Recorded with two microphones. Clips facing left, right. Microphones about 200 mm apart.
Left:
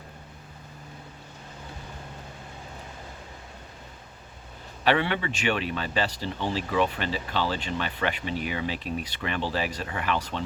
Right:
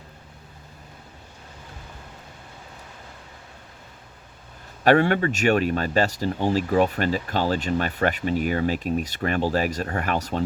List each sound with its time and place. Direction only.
4.8 s speech: 45° right (ahead or behind)